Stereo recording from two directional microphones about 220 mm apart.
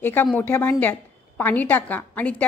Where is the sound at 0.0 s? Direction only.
10° left (ahead or behind).